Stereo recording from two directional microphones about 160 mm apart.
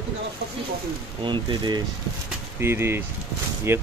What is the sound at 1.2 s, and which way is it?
Speech, 30° right (ahead or behind).